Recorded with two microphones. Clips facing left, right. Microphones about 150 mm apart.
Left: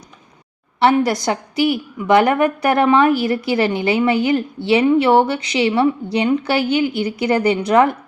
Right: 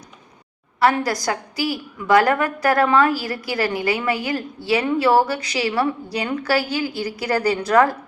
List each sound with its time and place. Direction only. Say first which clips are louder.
0.8 s a woman's voice: left 4 dB; 25° left (ahead or behind)